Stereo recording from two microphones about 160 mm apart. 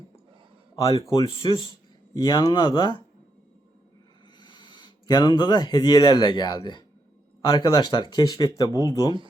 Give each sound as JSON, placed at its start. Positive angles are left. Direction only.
{"t": 1.0, "sound": "speech", "side_deg": 25}
{"t": 4.4, "sound": "speech", "side_deg": 30}